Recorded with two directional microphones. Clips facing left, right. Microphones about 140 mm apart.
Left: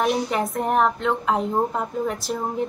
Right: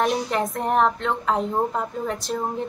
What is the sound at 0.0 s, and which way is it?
A woman's voice, 5° left (ahead or behind).